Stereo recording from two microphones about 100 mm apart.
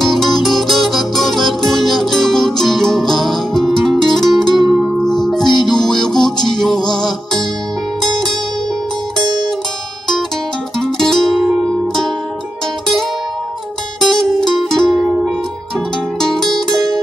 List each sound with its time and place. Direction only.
0.0 s music: centre (ahead or behind)
9.2 s zither: 45° right (ahead or behind)
10.8 s music: 5° left (ahead or behind)
14.0 s music: 5° left (ahead or behind)